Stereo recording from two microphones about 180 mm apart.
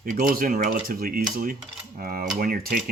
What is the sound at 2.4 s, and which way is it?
Speech, 55° right (ahead or behind).